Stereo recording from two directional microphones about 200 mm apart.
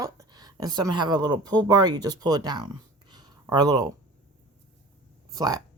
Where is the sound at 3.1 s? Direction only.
20° right (ahead or behind).